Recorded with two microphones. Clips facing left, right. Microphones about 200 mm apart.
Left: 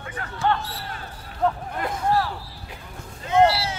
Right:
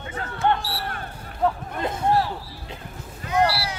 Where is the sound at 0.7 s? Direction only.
60° right (ahead or behind).